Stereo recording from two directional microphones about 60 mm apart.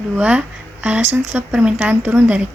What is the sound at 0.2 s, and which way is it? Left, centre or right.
Speech, right.